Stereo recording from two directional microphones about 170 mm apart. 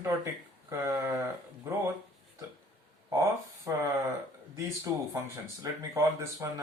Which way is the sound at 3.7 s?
15° right (ahead or behind).